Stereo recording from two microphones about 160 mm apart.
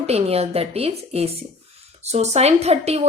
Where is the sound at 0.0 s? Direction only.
40° right (ahead or behind).